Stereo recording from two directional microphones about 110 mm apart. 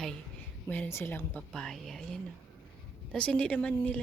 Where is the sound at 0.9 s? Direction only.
20° left (ahead or behind).